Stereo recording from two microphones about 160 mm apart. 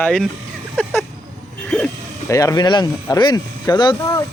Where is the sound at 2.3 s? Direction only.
20° left (ahead or behind).